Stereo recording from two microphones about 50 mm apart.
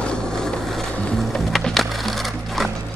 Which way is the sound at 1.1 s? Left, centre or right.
Centre.